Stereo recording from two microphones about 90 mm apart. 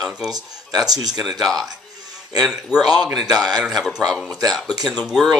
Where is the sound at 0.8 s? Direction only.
45° right (ahead or behind).